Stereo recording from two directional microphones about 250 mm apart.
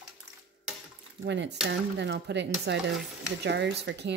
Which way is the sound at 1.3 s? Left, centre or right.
Right.